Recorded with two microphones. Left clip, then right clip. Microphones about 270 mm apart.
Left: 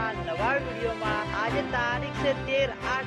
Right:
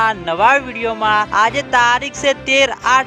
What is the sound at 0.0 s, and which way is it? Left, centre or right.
A man's voice, right.